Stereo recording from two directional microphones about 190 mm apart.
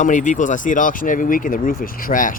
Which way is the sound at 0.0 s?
40° left (ahead or behind).